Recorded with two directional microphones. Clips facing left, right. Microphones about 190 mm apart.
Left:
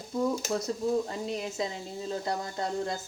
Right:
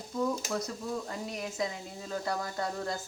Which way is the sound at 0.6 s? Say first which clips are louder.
Left 7 dB; 25° left (ahead or behind).